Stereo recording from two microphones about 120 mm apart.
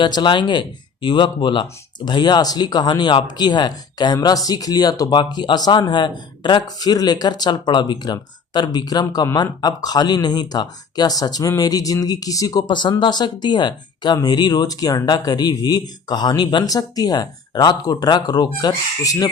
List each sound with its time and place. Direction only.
0.0 s speech: 40° left (ahead or behind)